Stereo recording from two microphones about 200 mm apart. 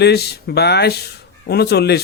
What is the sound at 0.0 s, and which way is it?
Speech, 55° left (ahead or behind).